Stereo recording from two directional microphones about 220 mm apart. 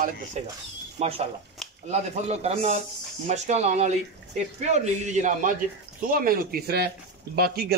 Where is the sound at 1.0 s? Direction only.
25° right (ahead or behind).